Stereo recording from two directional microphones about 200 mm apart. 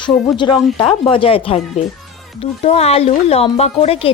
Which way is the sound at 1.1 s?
25° left (ahead or behind).